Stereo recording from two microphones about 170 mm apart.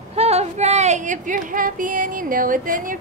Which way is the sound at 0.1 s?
35° right (ahead or behind).